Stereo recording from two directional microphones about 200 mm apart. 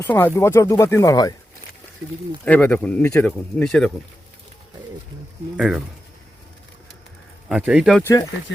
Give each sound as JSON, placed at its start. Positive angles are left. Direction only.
{"t": 0.0, "sound": "speech", "side_deg": 10}
{"t": 2.4, "sound": "speech", "side_deg": 10}
{"t": 5.5, "sound": "speech", "side_deg": -5}
{"t": 7.4, "sound": "speech", "side_deg": -5}
{"t": 8.5, "sound": "speech", "side_deg": 65}